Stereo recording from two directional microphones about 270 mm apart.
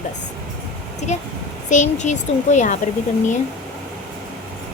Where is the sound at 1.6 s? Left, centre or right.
Left.